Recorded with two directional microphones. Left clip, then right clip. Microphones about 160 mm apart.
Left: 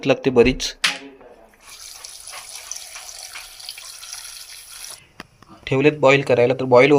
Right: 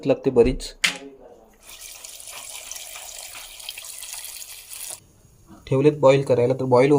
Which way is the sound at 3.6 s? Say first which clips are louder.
Left 1 dB; 40° right (ahead or behind).